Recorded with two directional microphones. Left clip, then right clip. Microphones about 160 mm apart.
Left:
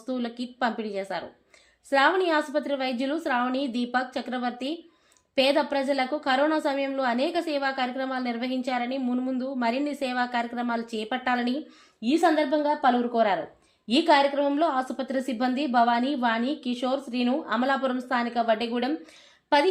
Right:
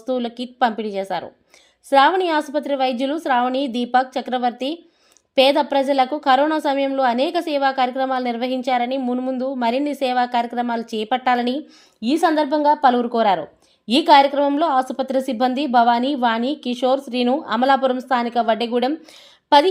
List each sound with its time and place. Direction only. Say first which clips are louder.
0.0 s a woman's voice: right 8 dB; 45° right (ahead or behind)
12.0 s a woman's voice: right 5 dB; 60° right (ahead or behind)